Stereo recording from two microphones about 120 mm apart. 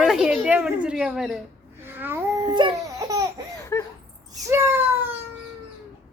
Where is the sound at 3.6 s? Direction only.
25° left (ahead or behind).